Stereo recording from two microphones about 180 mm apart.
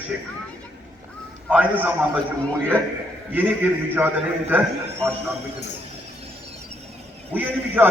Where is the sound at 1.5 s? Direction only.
10° right (ahead or behind).